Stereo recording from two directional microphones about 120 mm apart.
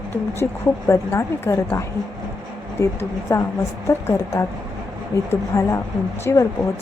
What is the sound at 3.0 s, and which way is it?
A woman's voice, 20° left (ahead or behind).